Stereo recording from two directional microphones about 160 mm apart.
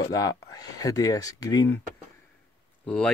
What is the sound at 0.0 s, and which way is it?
Speech, 25° left (ahead or behind).